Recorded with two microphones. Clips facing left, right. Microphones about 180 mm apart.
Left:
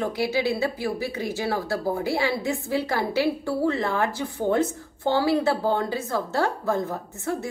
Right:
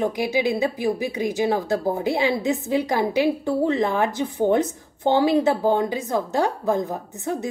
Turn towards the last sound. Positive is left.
turn(degrees=-20)  # may be behind; listen again after turning